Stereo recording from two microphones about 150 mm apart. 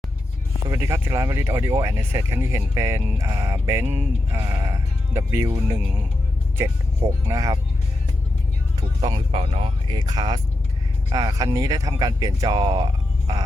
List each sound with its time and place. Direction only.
0.7 s speech: 20° right (ahead or behind)
9.0 s speech: 30° right (ahead or behind)